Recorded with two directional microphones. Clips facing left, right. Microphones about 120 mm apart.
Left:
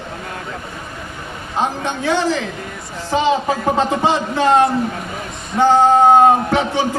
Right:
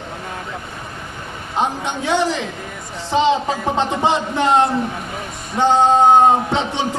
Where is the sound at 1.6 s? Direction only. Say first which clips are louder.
Left 1 dB; 20° right (ahead or behind).